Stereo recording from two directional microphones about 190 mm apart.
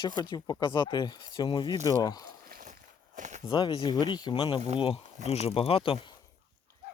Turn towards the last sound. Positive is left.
turn(degrees=25)  # may be behind; listen again after turning